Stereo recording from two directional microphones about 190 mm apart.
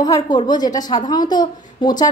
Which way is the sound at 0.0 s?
20° left (ahead or behind).